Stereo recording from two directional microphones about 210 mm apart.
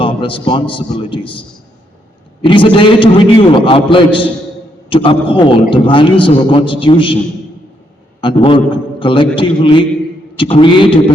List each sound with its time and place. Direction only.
0.0 s a man's voice: 25° left (ahead or behind)
8.2 s a man's voice: 25° left (ahead or behind)